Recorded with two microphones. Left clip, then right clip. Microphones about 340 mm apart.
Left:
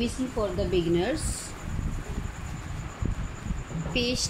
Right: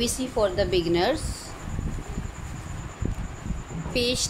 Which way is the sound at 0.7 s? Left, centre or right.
Centre.